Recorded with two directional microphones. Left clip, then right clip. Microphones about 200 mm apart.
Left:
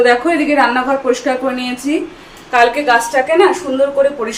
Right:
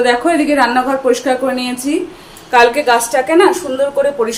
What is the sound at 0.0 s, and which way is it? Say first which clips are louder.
A woman's voice: left 1 dB; 15° right (ahead or behind).